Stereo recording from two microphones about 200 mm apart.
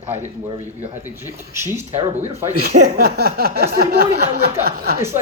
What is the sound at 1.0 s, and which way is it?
Speech, 10° right (ahead or behind).